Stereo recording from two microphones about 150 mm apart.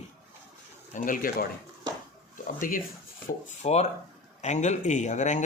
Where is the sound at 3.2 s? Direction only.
50° left (ahead or behind).